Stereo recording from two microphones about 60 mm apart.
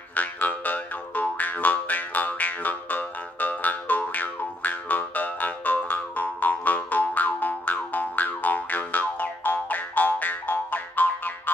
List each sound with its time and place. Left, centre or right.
0.1 s music: left